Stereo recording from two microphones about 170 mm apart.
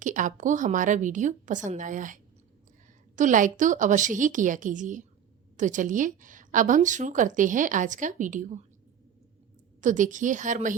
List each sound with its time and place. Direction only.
0.0 s a woman's voice: 50° right (ahead or behind)
9.8 s a woman's voice: 50° right (ahead or behind)